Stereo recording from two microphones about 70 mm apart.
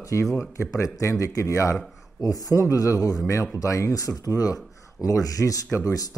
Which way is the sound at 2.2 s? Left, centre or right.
Left.